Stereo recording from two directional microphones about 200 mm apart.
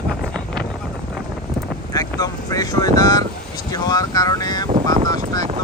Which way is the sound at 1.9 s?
15° left (ahead or behind).